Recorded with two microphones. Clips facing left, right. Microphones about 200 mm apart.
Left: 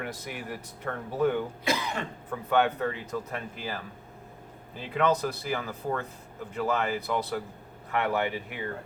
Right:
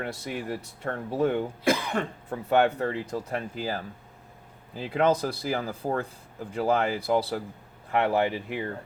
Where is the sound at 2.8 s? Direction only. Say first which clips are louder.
Right 2 dB; 30° right (ahead or behind).